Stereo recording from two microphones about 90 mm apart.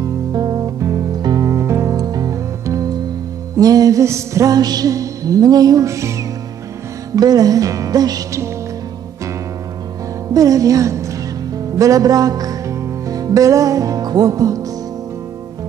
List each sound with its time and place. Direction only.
0.0 s music: 45° right (ahead or behind)
1.5 s music: 30° right (ahead or behind)
2.0 s music: 45° right (ahead or behind)
7.2 s speech: 45° right (ahead or behind)
10.3 s music: 40° right (ahead or behind)